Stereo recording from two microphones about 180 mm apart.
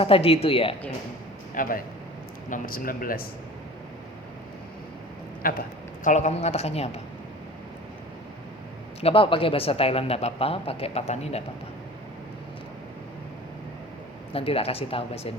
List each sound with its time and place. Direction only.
0.0 s a man's voice: 30° left (ahead or behind)
1.6 s speech: 50° left (ahead or behind)
5.4 s speech: 55° left (ahead or behind)
6.1 s a man's voice: 40° left (ahead or behind)
9.0 s a man's voice: 30° left (ahead or behind)
14.3 s a man's voice: 30° left (ahead or behind)